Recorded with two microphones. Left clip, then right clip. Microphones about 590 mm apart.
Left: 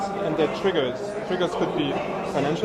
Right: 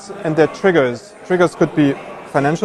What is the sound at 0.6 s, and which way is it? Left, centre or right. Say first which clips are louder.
A man's voice: right 9 dB; right.